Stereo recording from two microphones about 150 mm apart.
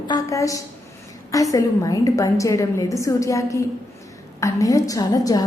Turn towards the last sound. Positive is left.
turn(degrees=25)  # may be behind; listen again after turning